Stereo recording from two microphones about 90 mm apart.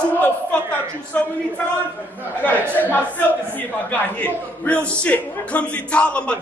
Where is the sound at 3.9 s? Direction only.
15° left (ahead or behind).